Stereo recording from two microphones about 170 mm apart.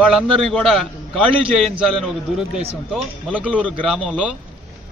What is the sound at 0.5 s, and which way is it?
A man's voice, centre (ahead or behind).